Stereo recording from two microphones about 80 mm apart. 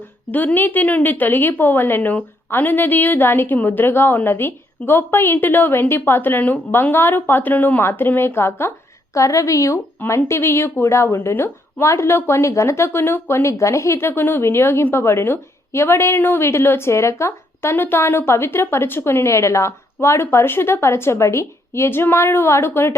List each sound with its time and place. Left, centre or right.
0.3 s a woman's voice: left
14.1 s a woman's voice: left